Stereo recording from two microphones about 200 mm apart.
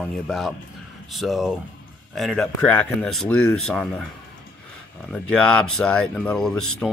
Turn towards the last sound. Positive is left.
turn(degrees=5)  # may be behind; listen again after turning